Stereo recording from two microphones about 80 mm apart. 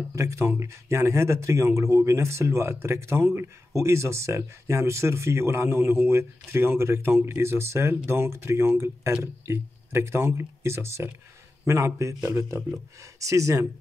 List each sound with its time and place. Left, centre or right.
0.1 s speech: right